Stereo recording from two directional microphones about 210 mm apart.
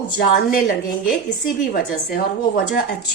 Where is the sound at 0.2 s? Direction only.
45° left (ahead or behind).